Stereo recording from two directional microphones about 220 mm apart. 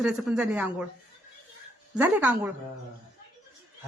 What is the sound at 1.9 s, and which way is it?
Speech, 5° right (ahead or behind).